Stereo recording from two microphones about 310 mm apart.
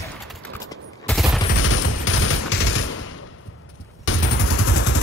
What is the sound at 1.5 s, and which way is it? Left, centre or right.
Fusillade, left.